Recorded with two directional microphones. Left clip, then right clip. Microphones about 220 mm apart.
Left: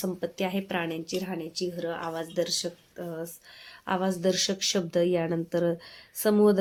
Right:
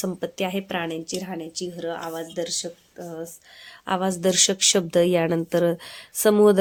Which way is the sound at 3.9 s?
25° right (ahead or behind).